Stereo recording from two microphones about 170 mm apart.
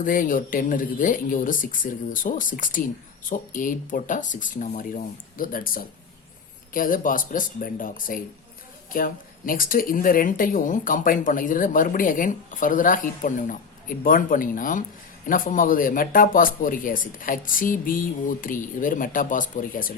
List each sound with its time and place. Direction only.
0.0 s speech: 55° left (ahead or behind)